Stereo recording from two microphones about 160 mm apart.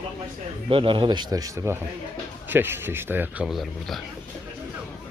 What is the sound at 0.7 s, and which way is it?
A man's voice, 35° right (ahead or behind).